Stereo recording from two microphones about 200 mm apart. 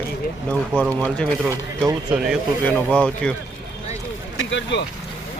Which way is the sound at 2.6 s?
5° left (ahead or behind).